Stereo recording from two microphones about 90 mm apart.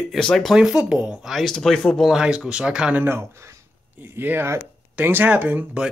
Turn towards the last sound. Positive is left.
turn(degrees=-15)  # may be behind; listen again after turning